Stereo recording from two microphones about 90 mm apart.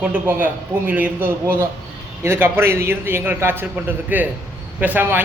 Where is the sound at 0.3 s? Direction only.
20° right (ahead or behind).